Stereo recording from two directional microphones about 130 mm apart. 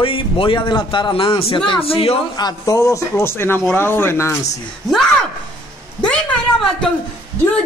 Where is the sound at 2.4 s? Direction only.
30° left (ahead or behind).